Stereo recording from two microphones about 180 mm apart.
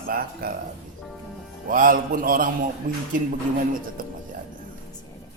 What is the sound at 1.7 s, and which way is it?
Speech, 50° right (ahead or behind).